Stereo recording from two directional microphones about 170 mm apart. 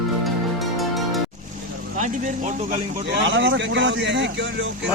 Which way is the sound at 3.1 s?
90° right.